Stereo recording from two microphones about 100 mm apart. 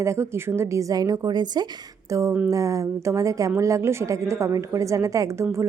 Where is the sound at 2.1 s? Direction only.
30° right (ahead or behind).